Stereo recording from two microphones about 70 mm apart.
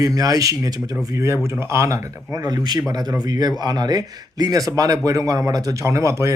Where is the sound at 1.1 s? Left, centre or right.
Right.